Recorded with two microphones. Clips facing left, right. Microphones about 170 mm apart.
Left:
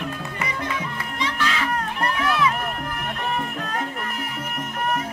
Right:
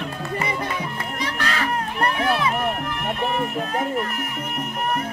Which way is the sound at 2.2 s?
30° right (ahead or behind).